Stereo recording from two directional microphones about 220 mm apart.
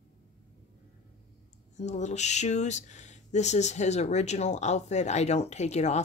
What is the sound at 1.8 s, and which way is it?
Speech, 30° left (ahead or behind).